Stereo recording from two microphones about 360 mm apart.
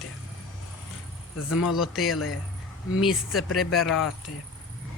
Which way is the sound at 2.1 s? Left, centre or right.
Left.